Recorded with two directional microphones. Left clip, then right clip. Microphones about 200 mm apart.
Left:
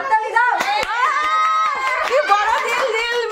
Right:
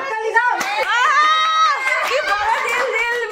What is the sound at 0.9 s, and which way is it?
Run, 5° right (ahead or behind).